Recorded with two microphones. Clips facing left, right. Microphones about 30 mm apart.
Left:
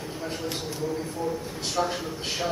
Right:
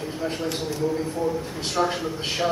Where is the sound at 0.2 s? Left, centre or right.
Right.